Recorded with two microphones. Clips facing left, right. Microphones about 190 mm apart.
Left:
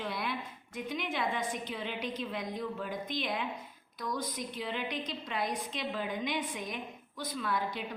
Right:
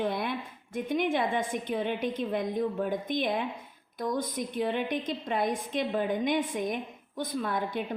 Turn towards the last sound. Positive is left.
turn(degrees=-50)  # may be behind; listen again after turning